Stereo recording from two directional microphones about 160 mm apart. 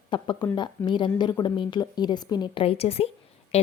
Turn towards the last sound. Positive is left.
turn(degrees=40)  # may be behind; listen again after turning